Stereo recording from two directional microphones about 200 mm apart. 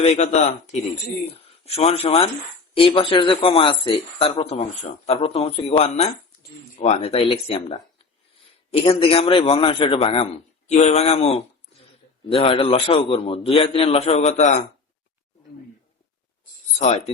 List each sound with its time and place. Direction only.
0.0 s speech: 35° left (ahead or behind)
16.7 s speech: 35° left (ahead or behind)